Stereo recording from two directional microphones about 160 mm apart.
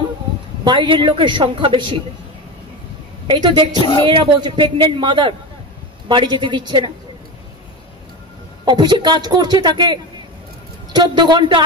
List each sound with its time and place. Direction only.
0.7 s a woman's voice: 30° right (ahead or behind)
3.3 s a man's voice: 30° right (ahead or behind)
3.7 s speech: 30° left (ahead or behind)
4.1 s a man's voice: 30° right (ahead or behind)
8.6 s a woman's voice: 25° right (ahead or behind)